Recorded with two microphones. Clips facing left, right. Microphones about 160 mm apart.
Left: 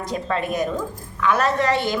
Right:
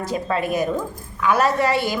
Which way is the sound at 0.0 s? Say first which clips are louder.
Right 2 dB; 5° right (ahead or behind).